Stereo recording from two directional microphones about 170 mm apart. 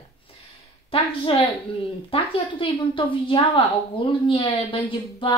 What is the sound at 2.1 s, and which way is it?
A woman's voice, 30° left (ahead or behind).